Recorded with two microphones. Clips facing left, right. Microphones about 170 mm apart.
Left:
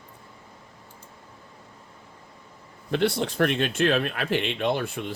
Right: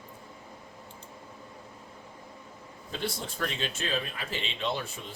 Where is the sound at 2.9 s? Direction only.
70° left (ahead or behind).